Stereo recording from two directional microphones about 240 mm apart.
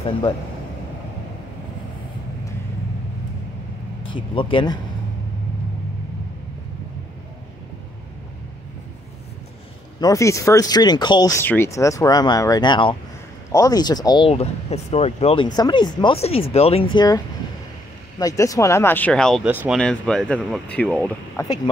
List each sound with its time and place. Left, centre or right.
4.1 s speech: left
9.9 s speech: centre
18.2 s speech: centre